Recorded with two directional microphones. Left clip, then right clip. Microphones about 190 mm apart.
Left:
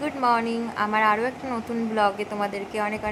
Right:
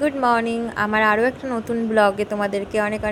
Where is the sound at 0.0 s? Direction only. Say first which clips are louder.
Right 4 dB; 20° right (ahead or behind).